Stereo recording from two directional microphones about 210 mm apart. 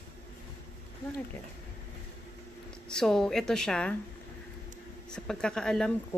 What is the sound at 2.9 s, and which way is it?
Speech, 5° left (ahead or behind).